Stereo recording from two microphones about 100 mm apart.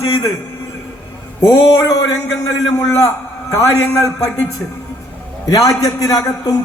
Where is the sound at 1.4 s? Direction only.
40° left (ahead or behind).